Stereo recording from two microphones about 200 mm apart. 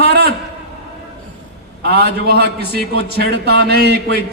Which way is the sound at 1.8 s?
55° right (ahead or behind).